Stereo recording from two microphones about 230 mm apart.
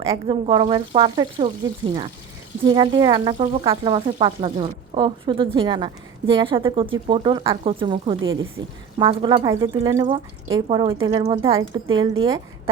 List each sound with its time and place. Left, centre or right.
0.0 s speech: right
2.6 s speech: right
8.2 s speech: right
9.0 s speech: right